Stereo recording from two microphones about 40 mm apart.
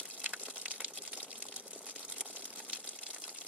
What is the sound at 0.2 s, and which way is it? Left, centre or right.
Water, right.